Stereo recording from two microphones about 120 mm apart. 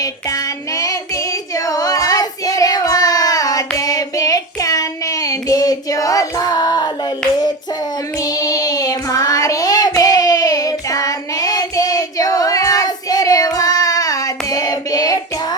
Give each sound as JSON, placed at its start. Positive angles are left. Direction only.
{"t": 0.0, "sound": "child singing", "side_deg": 30}
{"t": 8.2, "sound": "child singing", "side_deg": 30}